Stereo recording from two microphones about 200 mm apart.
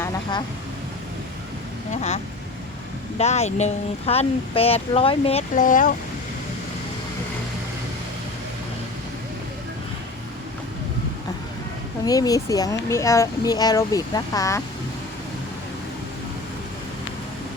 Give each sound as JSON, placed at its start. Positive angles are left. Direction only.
{"t": 0.0, "sound": "vehicle", "side_deg": 20}
{"t": 1.9, "sound": "speech", "side_deg": 35}
{"t": 12.0, "sound": "speech", "side_deg": 20}